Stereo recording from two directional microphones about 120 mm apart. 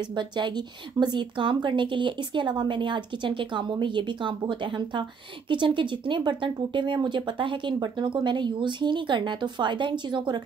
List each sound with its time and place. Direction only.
0.1 s speech: 40° right (ahead or behind)